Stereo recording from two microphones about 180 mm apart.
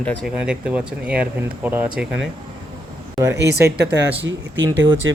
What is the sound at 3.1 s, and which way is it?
Speech, 15° right (ahead or behind).